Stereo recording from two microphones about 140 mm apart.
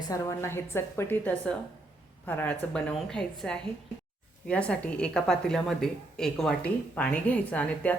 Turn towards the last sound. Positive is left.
turn(degrees=10)  # may be behind; listen again after turning